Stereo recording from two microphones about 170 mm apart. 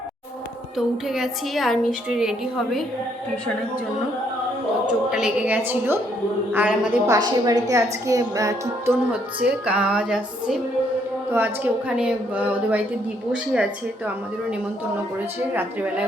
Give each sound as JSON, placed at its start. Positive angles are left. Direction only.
{"t": 0.8, "sound": "a woman's voice", "side_deg": 0}
{"t": 4.9, "sound": "a woman's voice", "side_deg": -5}
{"t": 7.1, "sound": "a woman's voice", "side_deg": -20}